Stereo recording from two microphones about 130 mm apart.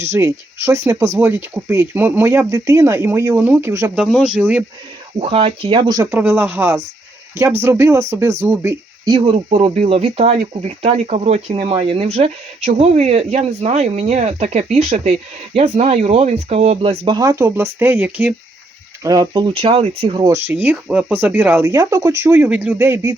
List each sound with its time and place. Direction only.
0.0 s speech: 20° right (ahead or behind)
3.9 s speech: 5° right (ahead or behind)
5.2 s speech: 45° right (ahead or behind)
6.0 s speech: 15° right (ahead or behind)
9.1 s speech: 50° right (ahead or behind)
17.2 s speech: 25° right (ahead or behind)
19.0 s speech: 30° right (ahead or behind); by 20.2 s 45° right (ahead or behind)
20.2 s speech: 15° right (ahead or behind)